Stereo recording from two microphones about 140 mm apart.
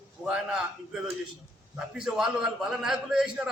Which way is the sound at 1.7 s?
5° right (ahead or behind).